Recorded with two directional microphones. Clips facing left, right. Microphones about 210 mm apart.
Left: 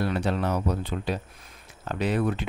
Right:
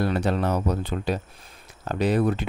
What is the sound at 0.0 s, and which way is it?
Speech, 40° right (ahead or behind).